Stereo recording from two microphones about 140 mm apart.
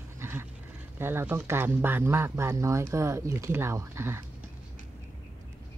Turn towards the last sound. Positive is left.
turn(degrees=-20)  # may be behind; listen again after turning